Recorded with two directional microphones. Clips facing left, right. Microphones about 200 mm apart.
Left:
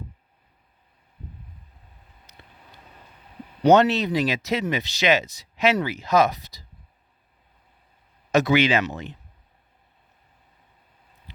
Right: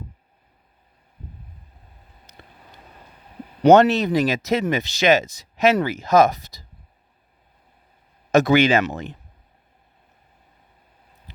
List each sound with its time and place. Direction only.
2.3 s vehicle: 45° right (ahead or behind)
3.6 s speech: 50° right (ahead or behind)
8.3 s speech: 50° right (ahead or behind)